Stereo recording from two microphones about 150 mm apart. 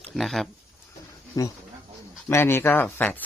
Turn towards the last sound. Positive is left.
turn(degrees=10)  # may be behind; listen again after turning